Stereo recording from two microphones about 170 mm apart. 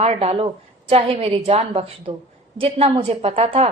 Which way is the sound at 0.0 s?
35° right (ahead or behind).